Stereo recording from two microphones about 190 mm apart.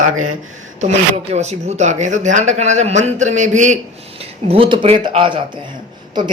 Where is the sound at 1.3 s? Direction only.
35° right (ahead or behind).